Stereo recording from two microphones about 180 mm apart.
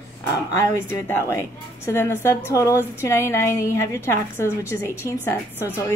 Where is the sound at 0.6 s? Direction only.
10° left (ahead or behind).